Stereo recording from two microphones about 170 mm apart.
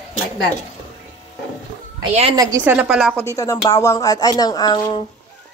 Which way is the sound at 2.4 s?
20° right (ahead or behind).